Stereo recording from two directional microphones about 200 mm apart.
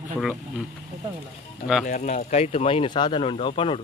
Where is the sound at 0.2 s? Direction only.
Centre (ahead or behind).